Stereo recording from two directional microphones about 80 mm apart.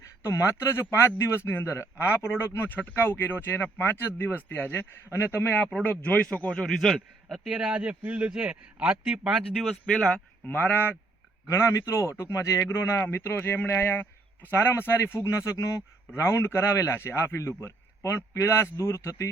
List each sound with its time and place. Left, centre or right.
0.0 s a man's voice: left; by 9.4 s centre
9.8 s speech: centre
11.4 s a man's voice: left